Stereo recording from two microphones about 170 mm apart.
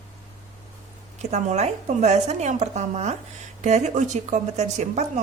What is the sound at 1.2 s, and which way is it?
A woman's voice, 40° right (ahead or behind).